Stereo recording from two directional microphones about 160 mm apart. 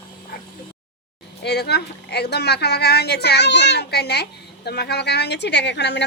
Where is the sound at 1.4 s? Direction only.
90° left.